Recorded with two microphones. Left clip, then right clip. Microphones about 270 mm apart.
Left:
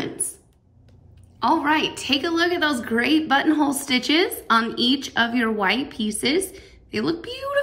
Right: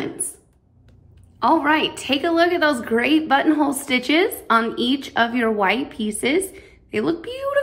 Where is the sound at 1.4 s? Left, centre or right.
Centre.